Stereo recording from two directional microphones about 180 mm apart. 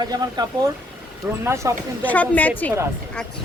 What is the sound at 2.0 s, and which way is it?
Speech, 10° left (ahead or behind).